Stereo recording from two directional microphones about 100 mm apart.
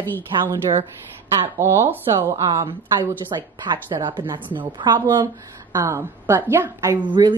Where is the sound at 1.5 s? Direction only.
25° right (ahead or behind).